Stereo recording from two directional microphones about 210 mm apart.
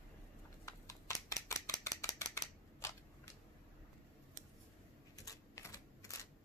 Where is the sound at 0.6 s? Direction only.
15° left (ahead or behind).